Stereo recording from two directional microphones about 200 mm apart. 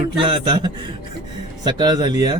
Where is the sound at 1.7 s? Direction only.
20° right (ahead or behind).